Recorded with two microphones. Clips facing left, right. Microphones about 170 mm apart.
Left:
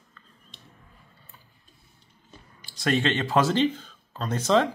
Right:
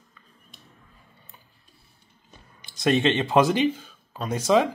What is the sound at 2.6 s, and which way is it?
Speech, 20° right (ahead or behind).